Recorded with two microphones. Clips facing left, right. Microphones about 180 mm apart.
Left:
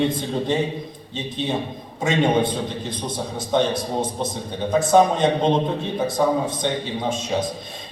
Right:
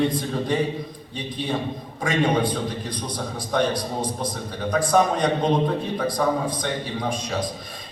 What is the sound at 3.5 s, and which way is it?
A man's voice, 25° left (ahead or behind).